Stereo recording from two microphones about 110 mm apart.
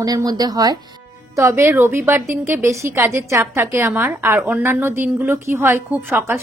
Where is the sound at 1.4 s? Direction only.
25° right (ahead or behind).